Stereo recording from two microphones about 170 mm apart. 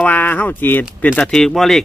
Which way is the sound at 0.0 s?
10° left (ahead or behind).